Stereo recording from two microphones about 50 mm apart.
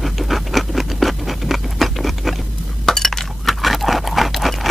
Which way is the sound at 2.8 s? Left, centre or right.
Centre.